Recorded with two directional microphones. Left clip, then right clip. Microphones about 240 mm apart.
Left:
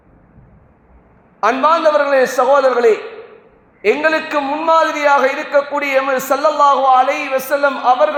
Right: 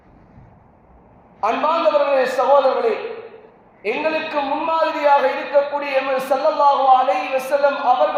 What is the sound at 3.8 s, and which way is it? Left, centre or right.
A man's voice, left.